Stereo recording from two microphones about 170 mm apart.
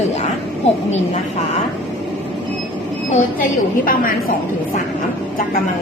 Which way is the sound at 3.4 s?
55° left (ahead or behind).